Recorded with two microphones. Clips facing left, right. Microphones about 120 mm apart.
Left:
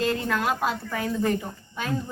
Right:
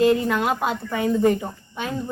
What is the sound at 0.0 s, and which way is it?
A woman's voice, 20° right (ahead or behind).